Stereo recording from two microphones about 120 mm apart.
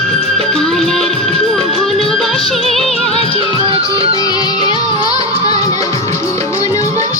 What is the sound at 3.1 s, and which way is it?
Music, 55° left (ahead or behind).